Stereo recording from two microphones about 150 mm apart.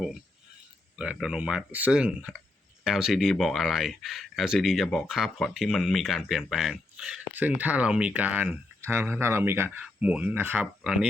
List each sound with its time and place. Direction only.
0.9 s speech: 5° right (ahead or behind)